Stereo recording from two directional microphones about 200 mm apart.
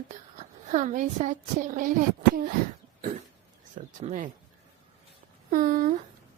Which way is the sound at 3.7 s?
35° right (ahead or behind).